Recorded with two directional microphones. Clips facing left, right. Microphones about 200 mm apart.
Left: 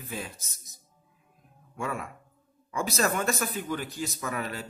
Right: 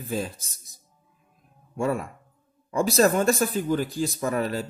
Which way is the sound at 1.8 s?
35° right (ahead or behind).